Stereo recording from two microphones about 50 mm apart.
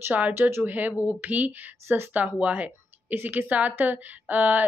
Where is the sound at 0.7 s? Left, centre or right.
Right.